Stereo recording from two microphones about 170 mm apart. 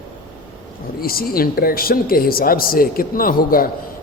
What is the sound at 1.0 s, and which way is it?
Speech, 60° left (ahead or behind).